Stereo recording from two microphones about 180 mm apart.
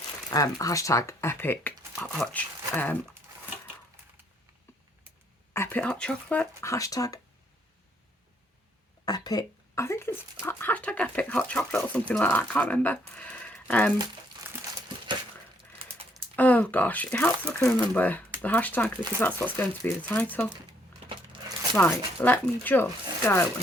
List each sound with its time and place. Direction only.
0.3 s speech: 20° left (ahead or behind)
5.5 s speech: 10° left (ahead or behind)
6.6 s speech: 15° left (ahead or behind)
9.0 s speech: 20° left (ahead or behind)
14.4 s crumpling: 20° right (ahead or behind)
16.3 s speech: 10° left (ahead or behind)
21.8 s speech: 10° left (ahead or behind)